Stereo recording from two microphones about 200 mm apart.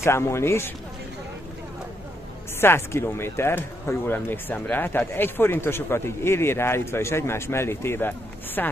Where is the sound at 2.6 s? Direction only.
10° left (ahead or behind).